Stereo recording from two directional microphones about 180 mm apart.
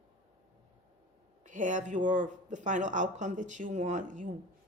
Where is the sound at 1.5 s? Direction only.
45° right (ahead or behind).